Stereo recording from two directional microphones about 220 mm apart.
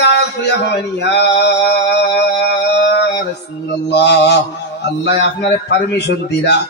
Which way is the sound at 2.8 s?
50° left (ahead or behind).